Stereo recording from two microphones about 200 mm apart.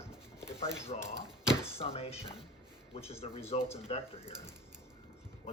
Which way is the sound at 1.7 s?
30° left (ahead or behind).